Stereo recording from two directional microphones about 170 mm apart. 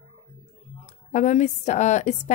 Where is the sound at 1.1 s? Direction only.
45° left (ahead or behind).